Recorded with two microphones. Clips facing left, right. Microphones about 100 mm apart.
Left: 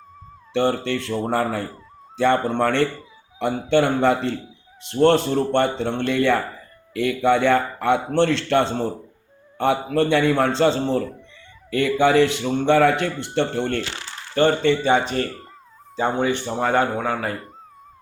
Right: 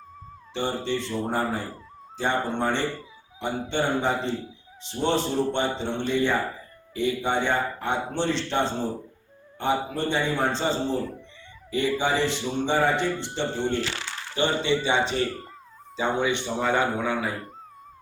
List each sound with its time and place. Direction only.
0.5 s a man's voice: 65° left (ahead or behind)
6.9 s a man's voice: 85° left; by 13.5 s 60° left (ahead or behind)
14.3 s a man's voice: 50° left (ahead or behind)